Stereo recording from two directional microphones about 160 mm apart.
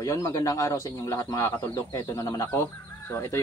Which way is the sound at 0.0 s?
20° left (ahead or behind).